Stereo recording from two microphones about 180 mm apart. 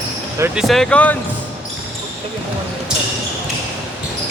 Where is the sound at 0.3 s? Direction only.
15° right (ahead or behind).